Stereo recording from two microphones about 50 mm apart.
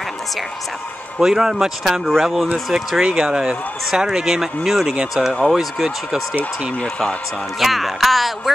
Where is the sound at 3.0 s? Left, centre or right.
Centre.